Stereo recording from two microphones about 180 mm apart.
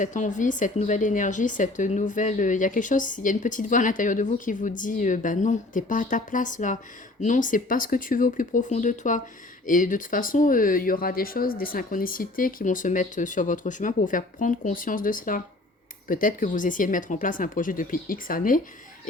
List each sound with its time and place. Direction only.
0.0 s a woman's voice: 45° left (ahead or behind)